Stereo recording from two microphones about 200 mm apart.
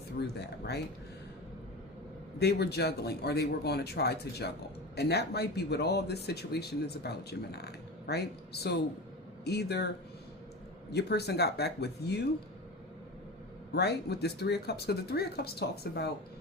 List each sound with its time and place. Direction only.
0.2 s speech: 55° left (ahead or behind)
2.4 s speech: 55° left (ahead or behind)
10.9 s speech: 55° left (ahead or behind)
13.7 s speech: 55° left (ahead or behind)